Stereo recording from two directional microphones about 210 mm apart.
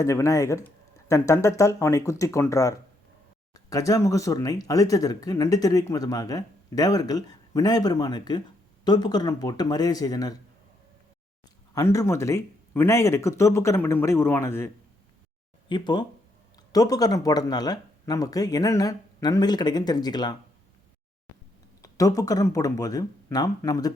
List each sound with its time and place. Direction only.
0.0 s speech: 15° left (ahead or behind)
11.7 s speech: 15° left (ahead or behind)
15.7 s speech: 20° left (ahead or behind)
21.8 s speech: 15° left (ahead or behind)